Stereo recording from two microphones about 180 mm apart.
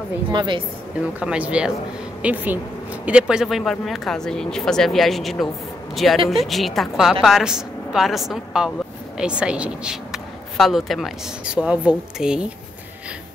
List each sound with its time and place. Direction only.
0.3 s a woman's voice: 25° right (ahead or behind)
1.2 s speech: 5° right (ahead or behind)